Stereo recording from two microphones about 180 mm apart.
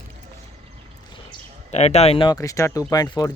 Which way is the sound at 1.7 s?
35° left (ahead or behind).